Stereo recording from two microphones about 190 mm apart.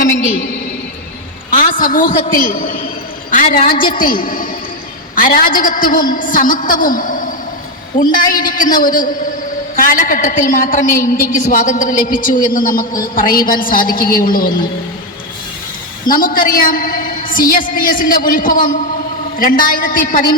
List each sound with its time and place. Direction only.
1.5 s a man's voice: 45° left (ahead or behind)
3.9 s a woman's voice: 50° left (ahead or behind)
16.0 s a woman's voice: 50° left (ahead or behind)